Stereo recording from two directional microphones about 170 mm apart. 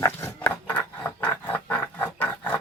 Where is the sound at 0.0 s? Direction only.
15° left (ahead or behind).